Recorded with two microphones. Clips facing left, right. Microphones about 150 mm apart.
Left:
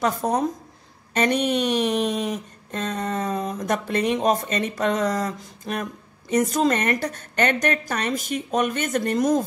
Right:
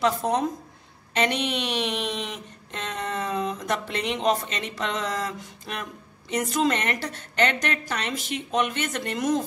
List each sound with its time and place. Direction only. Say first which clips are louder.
1.1 s speech: left 4 dB; 45° left (ahead or behind)